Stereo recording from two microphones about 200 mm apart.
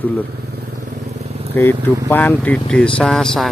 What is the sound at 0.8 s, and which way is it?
Vehicle, 35° right (ahead or behind).